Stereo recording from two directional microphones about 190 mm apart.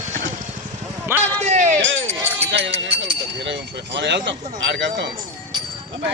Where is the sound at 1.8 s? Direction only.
80° right.